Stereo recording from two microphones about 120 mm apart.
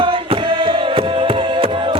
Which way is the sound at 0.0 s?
45° right (ahead or behind).